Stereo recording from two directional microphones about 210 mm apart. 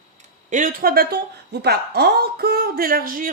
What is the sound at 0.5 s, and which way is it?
A woman's voice, 40° right (ahead or behind).